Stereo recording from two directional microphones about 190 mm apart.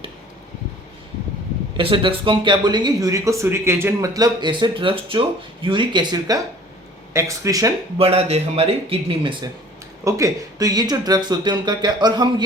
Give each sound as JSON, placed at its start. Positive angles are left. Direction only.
{"t": 1.7, "sound": "speech", "side_deg": -25}
{"t": 7.9, "sound": "speech", "side_deg": -30}
{"t": 10.0, "sound": "speech", "side_deg": -15}